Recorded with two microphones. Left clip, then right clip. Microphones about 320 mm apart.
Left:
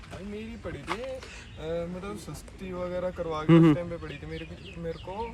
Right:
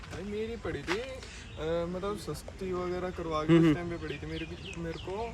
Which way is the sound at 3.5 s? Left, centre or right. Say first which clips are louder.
Left 4 dB; centre.